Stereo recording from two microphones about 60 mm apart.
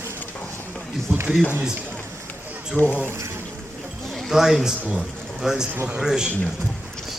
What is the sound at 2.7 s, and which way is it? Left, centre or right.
Speech, left.